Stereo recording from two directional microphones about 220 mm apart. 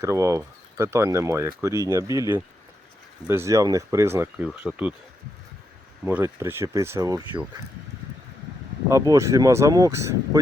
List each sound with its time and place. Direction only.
0.0 s speech: 15° right (ahead or behind)
6.1 s speech: 10° right (ahead or behind)
8.9 s speech: 15° right (ahead or behind)